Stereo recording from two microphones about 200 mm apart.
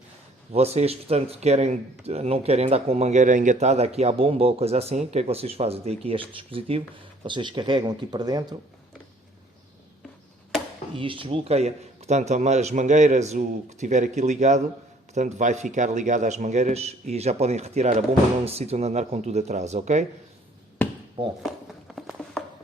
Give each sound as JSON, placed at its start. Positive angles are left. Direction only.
{"t": 0.5, "sound": "speech", "side_deg": -30}
{"t": 10.9, "sound": "speech", "side_deg": -25}
{"t": 21.9, "sound": "a sound", "side_deg": 0}